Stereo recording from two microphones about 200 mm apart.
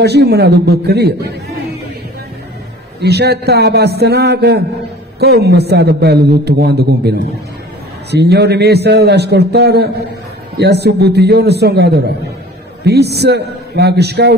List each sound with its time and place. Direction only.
0.0 s a man's voice: 55° right (ahead or behind)
3.0 s a man's voice: 55° right (ahead or behind)